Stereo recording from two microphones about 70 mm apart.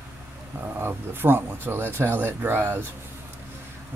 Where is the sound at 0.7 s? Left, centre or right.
Right.